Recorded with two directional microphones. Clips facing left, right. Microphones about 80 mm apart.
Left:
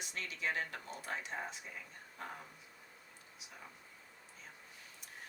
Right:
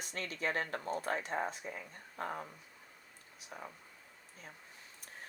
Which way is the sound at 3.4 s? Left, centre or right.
Right.